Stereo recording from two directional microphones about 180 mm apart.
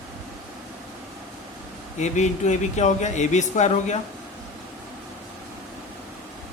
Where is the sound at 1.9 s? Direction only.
40° left (ahead or behind).